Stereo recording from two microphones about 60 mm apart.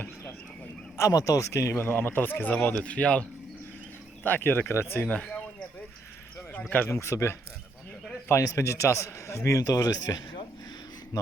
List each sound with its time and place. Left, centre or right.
0.9 s a man's voice: left
1.5 s speech: left
1.8 s speech: left; by 3.2 s centre
4.2 s speech: left
5.0 s a sound: left
6.5 s speech: left
6.9 s speech: left
8.5 s a man's voice: left